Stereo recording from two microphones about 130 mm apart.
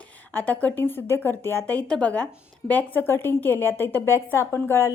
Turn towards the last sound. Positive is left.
turn(degrees=15)  # may be behind; listen again after turning